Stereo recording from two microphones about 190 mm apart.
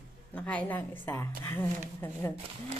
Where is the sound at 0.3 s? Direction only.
5° left (ahead or behind).